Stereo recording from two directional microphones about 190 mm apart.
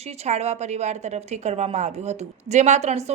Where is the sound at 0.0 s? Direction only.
35° right (ahead or behind).